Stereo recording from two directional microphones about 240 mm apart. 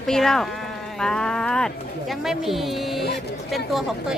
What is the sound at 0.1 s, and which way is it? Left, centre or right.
Speech, centre.